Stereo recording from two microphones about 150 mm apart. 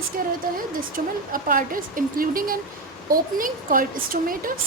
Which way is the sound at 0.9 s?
70° right (ahead or behind).